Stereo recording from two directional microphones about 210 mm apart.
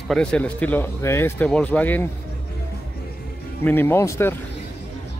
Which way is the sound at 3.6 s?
10° left (ahead or behind).